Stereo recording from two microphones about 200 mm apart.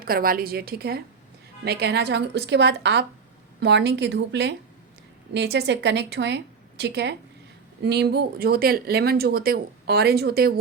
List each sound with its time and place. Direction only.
0.0 s a woman's voice: 45° right (ahead or behind)